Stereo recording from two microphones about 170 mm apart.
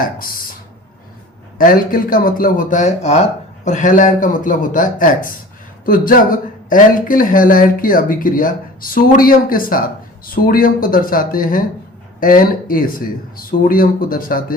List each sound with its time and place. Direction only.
0.2 s speech: 55° left (ahead or behind)
1.5 s a man's voice: 55° left (ahead or behind)